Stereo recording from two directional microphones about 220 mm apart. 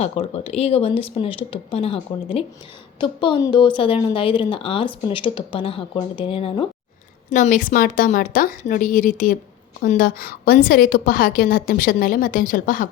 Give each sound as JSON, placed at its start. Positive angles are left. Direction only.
{"t": 0.0, "sound": "speech", "side_deg": 30}
{"t": 7.3, "sound": "a woman's voice", "side_deg": 35}